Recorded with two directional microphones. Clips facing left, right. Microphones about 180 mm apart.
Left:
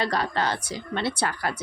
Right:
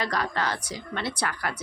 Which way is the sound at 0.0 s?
30° left (ahead or behind).